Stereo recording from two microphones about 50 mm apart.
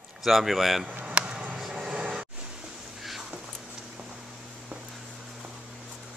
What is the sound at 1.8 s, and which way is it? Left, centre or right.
Vehicle, right.